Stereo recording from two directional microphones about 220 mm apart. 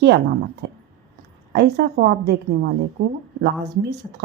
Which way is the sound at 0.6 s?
45° right (ahead or behind).